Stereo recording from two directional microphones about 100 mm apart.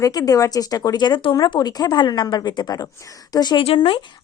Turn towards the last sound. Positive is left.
turn(degrees=55)  # may be behind; listen again after turning